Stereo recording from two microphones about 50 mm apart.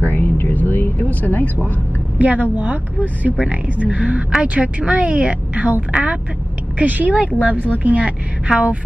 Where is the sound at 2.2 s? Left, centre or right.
Right.